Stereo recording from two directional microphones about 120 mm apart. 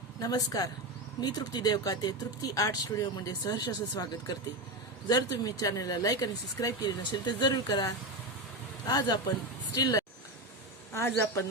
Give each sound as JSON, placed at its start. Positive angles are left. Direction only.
{"t": 0.2, "sound": "speech", "side_deg": 30}
{"t": 10.9, "sound": "speech", "side_deg": 20}